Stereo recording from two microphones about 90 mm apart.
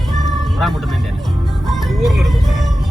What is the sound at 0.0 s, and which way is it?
Music, centre (ahead or behind).